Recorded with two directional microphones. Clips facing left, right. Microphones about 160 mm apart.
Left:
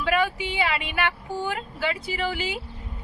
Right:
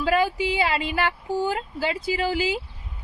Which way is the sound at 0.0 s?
35° right (ahead or behind).